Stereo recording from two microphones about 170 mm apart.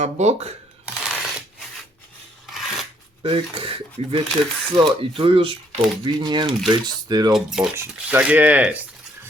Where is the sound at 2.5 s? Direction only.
Centre (ahead or behind).